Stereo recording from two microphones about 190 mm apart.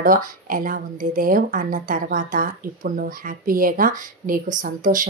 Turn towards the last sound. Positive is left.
turn(degrees=-45)  # may be behind; listen again after turning